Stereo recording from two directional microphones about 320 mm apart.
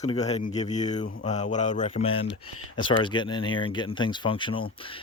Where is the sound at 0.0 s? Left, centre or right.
Left.